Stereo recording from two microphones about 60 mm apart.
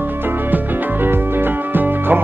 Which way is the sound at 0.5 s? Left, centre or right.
Right.